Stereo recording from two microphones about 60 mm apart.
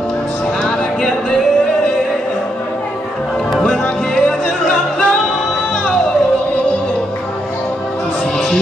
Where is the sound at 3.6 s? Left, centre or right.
Centre.